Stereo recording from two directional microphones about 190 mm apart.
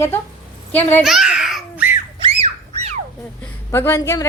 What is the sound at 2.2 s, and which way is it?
Squawk, 35° right (ahead or behind).